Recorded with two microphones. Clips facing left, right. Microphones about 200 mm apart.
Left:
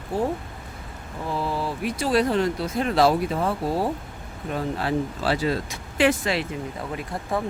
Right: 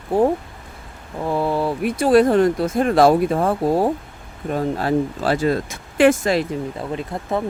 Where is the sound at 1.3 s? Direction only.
55° right (ahead or behind).